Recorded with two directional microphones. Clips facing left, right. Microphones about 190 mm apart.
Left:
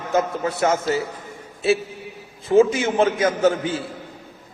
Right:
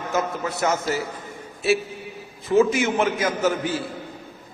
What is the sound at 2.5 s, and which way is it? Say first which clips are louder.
Speech: left 2 dB; 30° left (ahead or behind).